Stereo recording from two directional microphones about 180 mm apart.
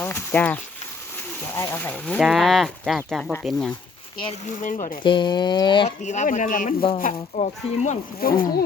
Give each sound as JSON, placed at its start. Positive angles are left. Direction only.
{"t": 0.0, "sound": "a sound", "side_deg": 10}
{"t": 1.5, "sound": "speech", "side_deg": 15}
{"t": 4.6, "sound": "speech", "side_deg": 45}
{"t": 5.0, "sound": "speech", "side_deg": 25}
{"t": 6.0, "sound": "speech", "side_deg": 40}